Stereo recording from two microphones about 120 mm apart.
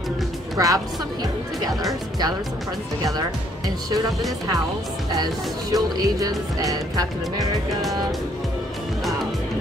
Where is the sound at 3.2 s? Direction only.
30° right (ahead or behind).